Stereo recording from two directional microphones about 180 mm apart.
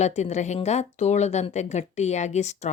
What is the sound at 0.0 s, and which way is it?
A woman's voice, 40° left (ahead or behind).